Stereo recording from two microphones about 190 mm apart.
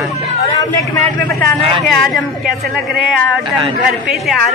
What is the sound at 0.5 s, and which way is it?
A man's voice, 20° left (ahead or behind).